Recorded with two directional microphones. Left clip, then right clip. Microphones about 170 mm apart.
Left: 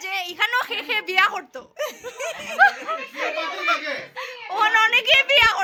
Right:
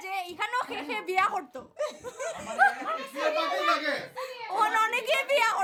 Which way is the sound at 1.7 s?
25° left (ahead or behind).